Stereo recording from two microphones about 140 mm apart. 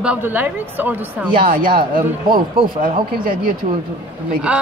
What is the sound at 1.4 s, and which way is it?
Speech, 85° right.